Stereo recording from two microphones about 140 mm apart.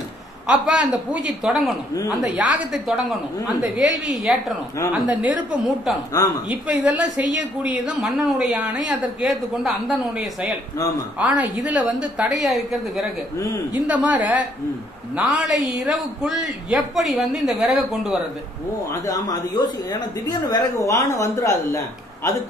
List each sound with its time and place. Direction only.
0.5 s a man's voice: 10° right (ahead or behind)
6.2 s speech: 25° left (ahead or behind)
6.5 s a woman's voice: 10° right (ahead or behind)
19.0 s speech: 25° left (ahead or behind)